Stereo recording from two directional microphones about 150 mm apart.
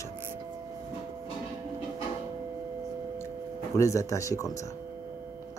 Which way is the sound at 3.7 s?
20° left (ahead or behind).